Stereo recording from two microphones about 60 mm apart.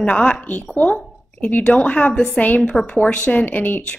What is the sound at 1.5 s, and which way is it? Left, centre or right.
Speech, left.